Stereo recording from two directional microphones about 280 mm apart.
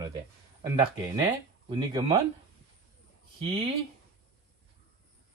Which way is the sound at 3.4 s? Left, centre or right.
Centre.